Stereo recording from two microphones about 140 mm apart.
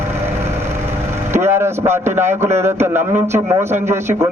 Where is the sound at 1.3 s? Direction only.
20° right (ahead or behind).